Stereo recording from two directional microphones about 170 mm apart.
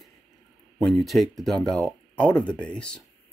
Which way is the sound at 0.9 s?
Centre (ahead or behind).